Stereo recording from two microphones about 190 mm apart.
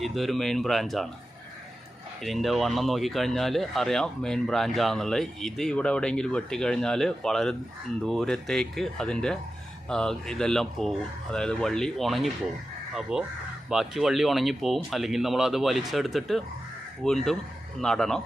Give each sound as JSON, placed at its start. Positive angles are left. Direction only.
{"t": 0.0, "sound": "speech", "side_deg": 0}
{"t": 2.2, "sound": "speech", "side_deg": 0}